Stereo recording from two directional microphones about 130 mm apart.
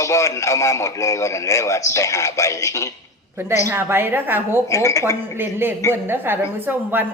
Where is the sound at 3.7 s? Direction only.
20° right (ahead or behind).